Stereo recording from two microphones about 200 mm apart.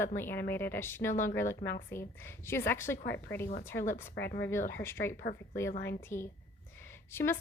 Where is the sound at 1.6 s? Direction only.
50° left (ahead or behind).